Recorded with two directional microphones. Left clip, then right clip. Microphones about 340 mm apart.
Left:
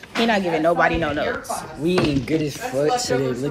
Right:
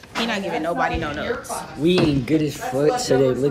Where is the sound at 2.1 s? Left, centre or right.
Centre.